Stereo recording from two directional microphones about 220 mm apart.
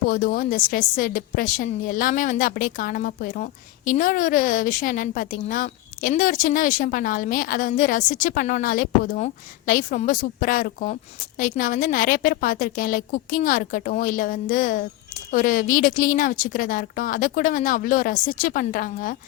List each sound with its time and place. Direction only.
0.1 s a woman's voice: 40° left (ahead or behind)